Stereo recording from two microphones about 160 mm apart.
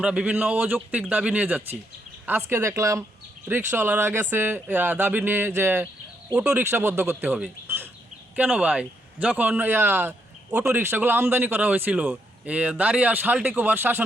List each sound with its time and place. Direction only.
0.0 s a man's voice: 5° right (ahead or behind)